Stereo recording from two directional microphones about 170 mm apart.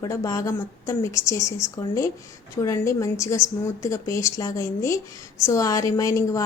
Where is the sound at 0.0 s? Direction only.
20° left (ahead or behind).